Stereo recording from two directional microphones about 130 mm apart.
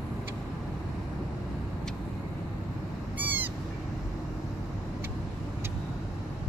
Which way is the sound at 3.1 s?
15° right (ahead or behind).